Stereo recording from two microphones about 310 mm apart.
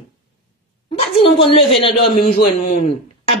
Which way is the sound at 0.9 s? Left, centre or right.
Centre.